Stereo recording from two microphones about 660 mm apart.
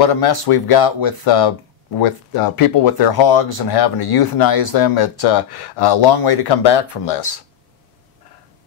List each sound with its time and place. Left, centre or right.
0.0 s speech: left
2.3 s speech: left